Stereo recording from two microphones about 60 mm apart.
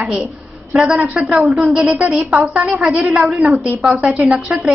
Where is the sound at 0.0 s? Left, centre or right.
Centre.